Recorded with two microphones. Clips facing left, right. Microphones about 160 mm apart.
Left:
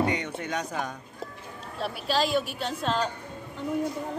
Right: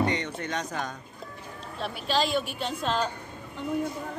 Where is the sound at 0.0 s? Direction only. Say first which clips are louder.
Even; 5° left (ahead or behind).